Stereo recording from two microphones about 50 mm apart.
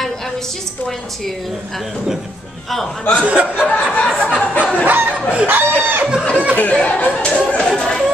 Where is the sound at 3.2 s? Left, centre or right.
Right.